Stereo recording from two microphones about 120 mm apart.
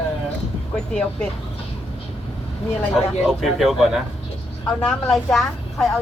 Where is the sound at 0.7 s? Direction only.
5° left (ahead or behind).